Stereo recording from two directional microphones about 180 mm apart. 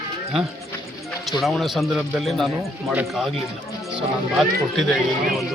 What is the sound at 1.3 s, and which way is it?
Speech, centre (ahead or behind).